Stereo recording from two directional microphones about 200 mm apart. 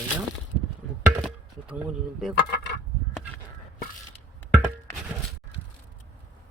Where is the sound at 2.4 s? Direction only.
55° left (ahead or behind).